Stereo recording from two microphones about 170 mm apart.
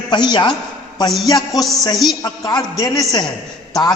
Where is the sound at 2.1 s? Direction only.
25° left (ahead or behind).